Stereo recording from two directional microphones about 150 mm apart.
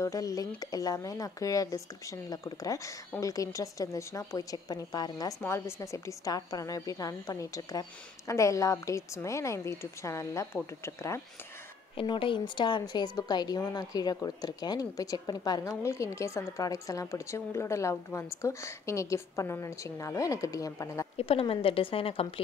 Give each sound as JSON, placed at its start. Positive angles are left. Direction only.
{"t": 0.0, "sound": "a woman's voice", "side_deg": 25}
{"t": 12.0, "sound": "a woman's voice", "side_deg": 35}
{"t": 21.2, "sound": "a woman's voice", "side_deg": 40}